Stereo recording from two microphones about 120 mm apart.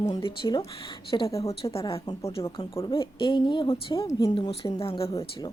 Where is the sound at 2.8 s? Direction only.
45° left (ahead or behind).